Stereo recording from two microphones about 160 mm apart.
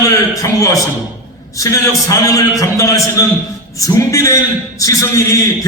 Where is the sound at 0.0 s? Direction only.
20° left (ahead or behind).